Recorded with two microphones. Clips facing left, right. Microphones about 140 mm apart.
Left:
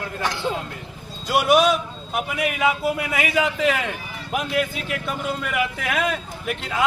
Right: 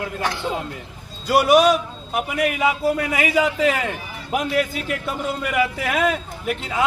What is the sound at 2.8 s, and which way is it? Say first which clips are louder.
Speech: right 3 dB; 35° right (ahead or behind).